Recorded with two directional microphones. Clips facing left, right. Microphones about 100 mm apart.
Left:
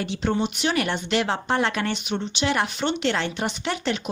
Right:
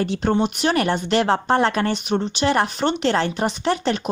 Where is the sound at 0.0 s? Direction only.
45° right (ahead or behind).